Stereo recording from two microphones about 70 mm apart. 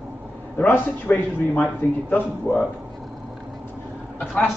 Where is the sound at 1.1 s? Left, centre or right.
Left.